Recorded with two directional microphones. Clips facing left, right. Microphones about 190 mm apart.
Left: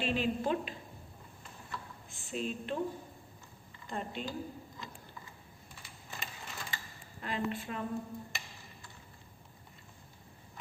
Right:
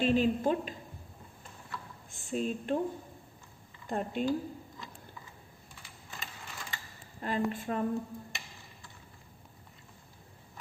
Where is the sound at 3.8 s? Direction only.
50° right (ahead or behind).